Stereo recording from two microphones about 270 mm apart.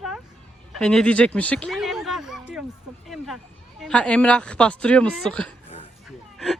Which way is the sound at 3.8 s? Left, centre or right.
Centre.